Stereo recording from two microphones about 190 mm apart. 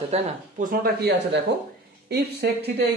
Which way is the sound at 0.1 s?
45° right (ahead or behind).